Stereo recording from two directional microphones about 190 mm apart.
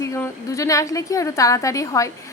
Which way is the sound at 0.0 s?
15° left (ahead or behind).